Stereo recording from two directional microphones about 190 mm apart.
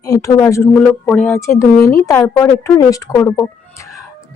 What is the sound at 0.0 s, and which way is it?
A woman's voice, 20° left (ahead or behind).